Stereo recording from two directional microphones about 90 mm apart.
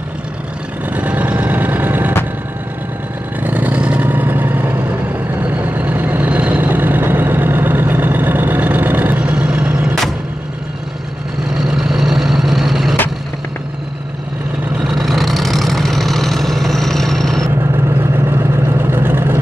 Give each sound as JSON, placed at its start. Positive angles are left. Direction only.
{"t": 0.8, "sound": "vehicle", "side_deg": -20}
{"t": 3.3, "sound": "vehicle", "side_deg": -20}
{"t": 11.5, "sound": "vehicle", "side_deg": -5}
{"t": 14.8, "sound": "vehicle", "side_deg": 0}
{"t": 17.8, "sound": "vehicle", "side_deg": -30}